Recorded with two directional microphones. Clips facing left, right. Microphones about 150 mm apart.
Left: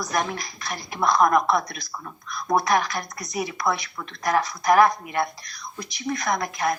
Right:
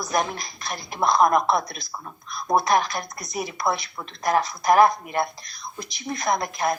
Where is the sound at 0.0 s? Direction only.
25° right (ahead or behind).